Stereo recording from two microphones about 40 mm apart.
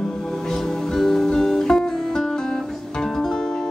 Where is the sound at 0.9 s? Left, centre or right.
Centre.